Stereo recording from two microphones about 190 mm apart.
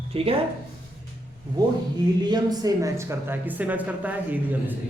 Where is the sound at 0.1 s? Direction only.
30° right (ahead or behind).